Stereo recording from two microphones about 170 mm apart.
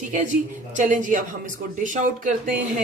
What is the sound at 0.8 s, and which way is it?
Speech, 50° right (ahead or behind).